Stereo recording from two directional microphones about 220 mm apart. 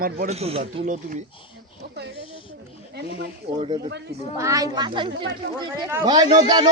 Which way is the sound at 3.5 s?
25° right (ahead or behind).